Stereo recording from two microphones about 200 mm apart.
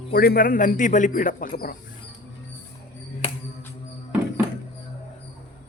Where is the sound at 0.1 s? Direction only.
45° left (ahead or behind).